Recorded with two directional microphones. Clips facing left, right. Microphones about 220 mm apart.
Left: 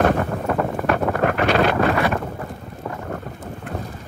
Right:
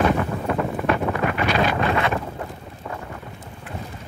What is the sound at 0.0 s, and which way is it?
Wind noise, 50° left (ahead or behind).